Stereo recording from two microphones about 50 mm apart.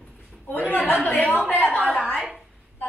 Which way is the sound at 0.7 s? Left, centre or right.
Left.